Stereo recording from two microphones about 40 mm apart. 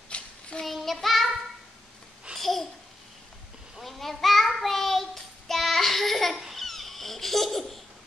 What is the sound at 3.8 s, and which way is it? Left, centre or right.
Child singing, centre.